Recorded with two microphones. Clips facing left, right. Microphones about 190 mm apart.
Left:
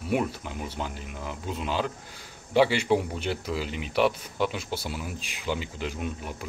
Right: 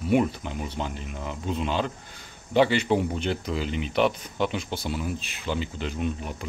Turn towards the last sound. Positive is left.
turn(degrees=5)  # may be behind; listen again after turning